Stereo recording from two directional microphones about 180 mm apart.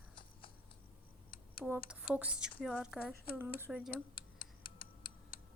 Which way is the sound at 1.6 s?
5° right (ahead or behind).